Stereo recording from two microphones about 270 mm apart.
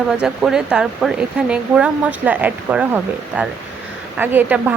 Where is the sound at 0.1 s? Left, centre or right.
Centre.